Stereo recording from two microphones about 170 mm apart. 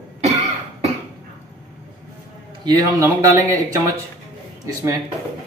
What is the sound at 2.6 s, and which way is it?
Speech, 20° right (ahead or behind).